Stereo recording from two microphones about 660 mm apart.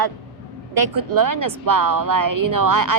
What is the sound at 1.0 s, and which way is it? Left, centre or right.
Speech, right.